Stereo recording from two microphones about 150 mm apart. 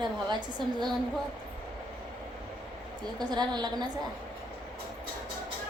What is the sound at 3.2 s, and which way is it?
Speech, 30° right (ahead or behind).